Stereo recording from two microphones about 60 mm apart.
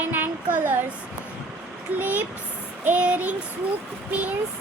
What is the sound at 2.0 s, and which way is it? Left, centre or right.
A child's voice, right.